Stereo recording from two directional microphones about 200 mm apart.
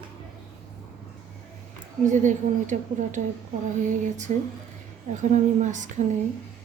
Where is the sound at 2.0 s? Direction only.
40° right (ahead or behind).